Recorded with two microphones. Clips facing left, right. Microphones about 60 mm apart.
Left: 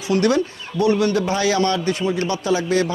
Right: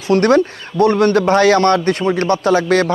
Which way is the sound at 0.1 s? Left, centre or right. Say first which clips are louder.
Right 6 dB; right.